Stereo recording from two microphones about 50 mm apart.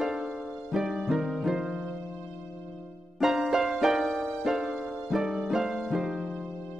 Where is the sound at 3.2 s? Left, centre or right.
Centre.